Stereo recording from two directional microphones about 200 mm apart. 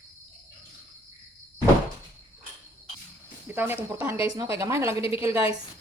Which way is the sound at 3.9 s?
10° right (ahead or behind).